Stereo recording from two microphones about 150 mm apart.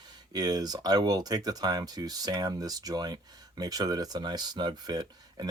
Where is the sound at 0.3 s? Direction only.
25° right (ahead or behind).